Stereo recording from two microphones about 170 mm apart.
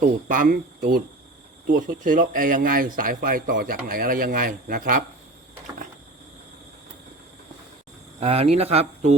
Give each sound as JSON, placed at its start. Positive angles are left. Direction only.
{"t": 0.3, "sound": "speech", "side_deg": -55}
{"t": 8.2, "sound": "speech", "side_deg": -35}